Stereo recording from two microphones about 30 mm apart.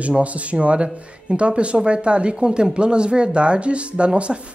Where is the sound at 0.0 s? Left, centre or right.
Right.